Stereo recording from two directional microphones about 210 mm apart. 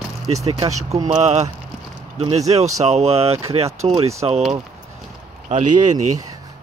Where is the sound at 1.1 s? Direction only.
30° right (ahead or behind).